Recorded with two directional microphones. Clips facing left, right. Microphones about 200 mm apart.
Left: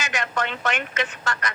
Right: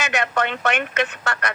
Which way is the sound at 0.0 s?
65° right (ahead or behind).